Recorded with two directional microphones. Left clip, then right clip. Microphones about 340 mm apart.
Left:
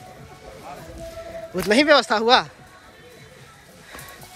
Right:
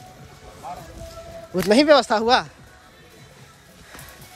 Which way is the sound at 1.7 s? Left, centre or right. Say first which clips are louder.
Right 1 dB; centre.